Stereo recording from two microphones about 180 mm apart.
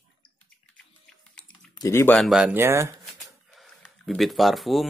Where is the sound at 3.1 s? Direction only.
Centre (ahead or behind).